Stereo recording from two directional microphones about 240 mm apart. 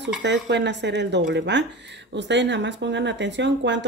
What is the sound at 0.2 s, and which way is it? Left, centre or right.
Speech, right.